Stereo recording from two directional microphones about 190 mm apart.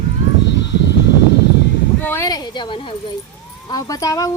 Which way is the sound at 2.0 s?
10° left (ahead or behind).